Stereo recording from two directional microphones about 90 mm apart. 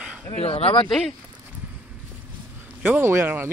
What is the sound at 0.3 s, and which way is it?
Speech, 90° left.